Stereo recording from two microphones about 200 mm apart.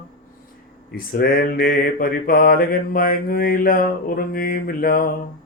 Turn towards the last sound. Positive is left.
turn(degrees=45)  # may be behind; listen again after turning